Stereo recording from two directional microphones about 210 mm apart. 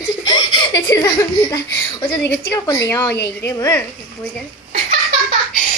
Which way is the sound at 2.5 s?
15° left (ahead or behind).